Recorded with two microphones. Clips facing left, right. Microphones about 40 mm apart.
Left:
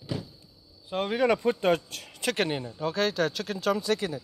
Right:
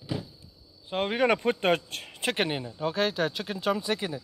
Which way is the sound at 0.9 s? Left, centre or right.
Right.